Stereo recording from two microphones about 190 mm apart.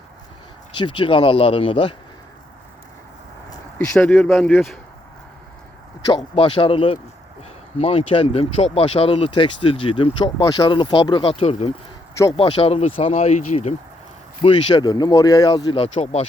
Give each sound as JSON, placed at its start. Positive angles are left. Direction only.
{"t": 0.7, "sound": "speech", "side_deg": 25}
{"t": 3.8, "sound": "speech", "side_deg": 5}
{"t": 6.3, "sound": "speech", "side_deg": 30}
{"t": 14.4, "sound": "speech", "side_deg": 25}